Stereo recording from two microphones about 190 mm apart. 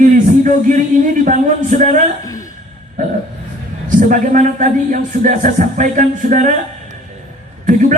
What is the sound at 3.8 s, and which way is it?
A man's voice, 45° right (ahead or behind).